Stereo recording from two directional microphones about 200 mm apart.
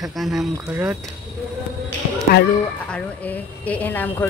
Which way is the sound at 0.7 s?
10° right (ahead or behind).